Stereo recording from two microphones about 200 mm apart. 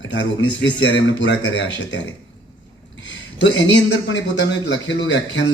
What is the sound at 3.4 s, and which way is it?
A man's voice, 65° left (ahead or behind).